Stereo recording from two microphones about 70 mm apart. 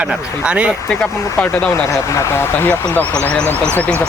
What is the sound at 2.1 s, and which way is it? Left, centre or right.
Speech, left.